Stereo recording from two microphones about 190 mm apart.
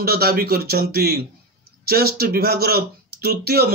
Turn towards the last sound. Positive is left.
turn(degrees=-55)  # may be behind; listen again after turning